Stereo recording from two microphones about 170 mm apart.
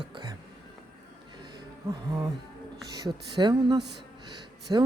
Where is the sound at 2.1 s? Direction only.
20° right (ahead or behind).